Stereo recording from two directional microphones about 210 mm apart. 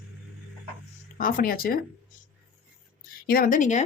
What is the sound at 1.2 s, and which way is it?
Speech, 40° left (ahead or behind).